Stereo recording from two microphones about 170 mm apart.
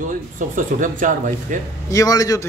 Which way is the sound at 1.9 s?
20° left (ahead or behind).